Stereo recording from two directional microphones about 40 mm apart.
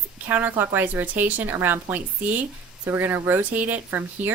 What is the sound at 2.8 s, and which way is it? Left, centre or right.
Speech, right.